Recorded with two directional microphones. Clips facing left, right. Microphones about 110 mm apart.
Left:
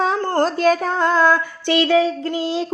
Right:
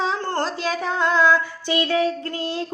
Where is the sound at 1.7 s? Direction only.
90° left.